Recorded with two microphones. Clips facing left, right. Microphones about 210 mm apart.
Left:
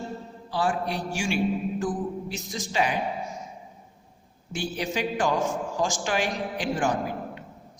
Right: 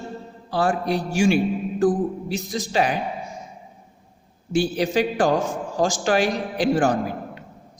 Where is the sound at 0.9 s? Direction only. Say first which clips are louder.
Right 9 dB; 40° right (ahead or behind).